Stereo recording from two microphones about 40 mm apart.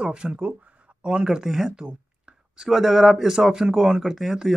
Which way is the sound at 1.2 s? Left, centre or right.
Centre.